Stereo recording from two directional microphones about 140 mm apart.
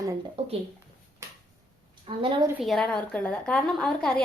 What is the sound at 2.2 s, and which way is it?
Speech, 40° right (ahead or behind).